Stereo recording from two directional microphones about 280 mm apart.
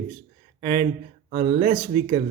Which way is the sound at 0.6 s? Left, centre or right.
Right.